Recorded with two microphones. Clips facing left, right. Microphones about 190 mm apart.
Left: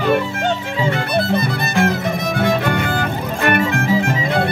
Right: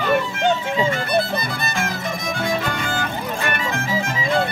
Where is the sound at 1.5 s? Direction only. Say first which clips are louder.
Left 8 dB; 60° left (ahead or behind).